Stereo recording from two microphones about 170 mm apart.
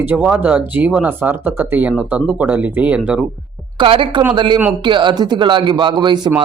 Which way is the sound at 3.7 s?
30° right (ahead or behind).